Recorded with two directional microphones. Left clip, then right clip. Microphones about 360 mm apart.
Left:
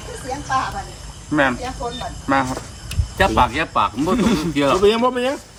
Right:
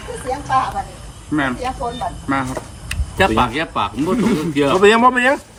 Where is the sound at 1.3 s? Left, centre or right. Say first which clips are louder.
Left 2 dB; centre.